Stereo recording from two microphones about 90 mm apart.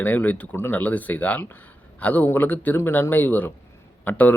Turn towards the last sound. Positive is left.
turn(degrees=20)  # may be behind; listen again after turning